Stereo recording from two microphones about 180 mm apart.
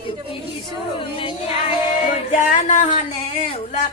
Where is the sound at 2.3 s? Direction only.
45° left (ahead or behind).